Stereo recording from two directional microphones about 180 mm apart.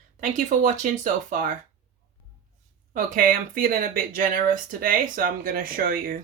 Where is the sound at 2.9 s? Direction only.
50° right (ahead or behind).